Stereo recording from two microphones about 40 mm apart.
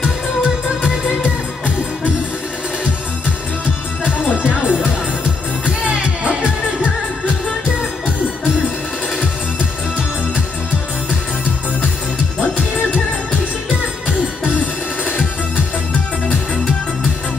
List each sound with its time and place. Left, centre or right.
4.4 s music: right